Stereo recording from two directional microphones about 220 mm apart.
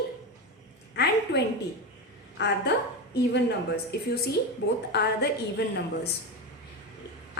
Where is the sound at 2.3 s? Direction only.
50° left (ahead or behind).